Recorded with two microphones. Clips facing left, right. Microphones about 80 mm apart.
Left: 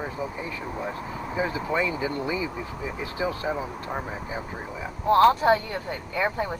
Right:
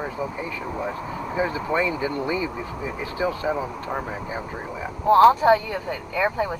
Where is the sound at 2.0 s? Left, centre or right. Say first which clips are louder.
Right 3 dB; right.